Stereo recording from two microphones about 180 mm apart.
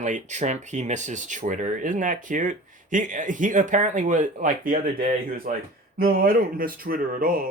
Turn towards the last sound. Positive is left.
turn(degrees=-50)  # may be behind; listen again after turning